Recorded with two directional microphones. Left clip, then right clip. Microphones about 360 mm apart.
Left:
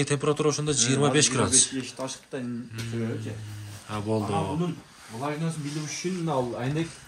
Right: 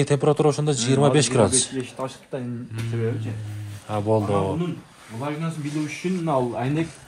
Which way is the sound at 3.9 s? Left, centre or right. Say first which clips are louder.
Right 6 dB; centre.